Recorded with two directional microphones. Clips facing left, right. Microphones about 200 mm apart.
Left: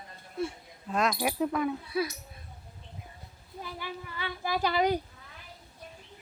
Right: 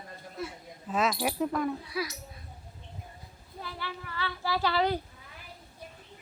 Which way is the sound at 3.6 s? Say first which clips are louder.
Left 1 dB; 15° left (ahead or behind).